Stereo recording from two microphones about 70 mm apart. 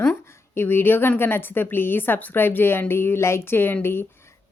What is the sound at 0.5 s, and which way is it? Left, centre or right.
A woman's voice, left.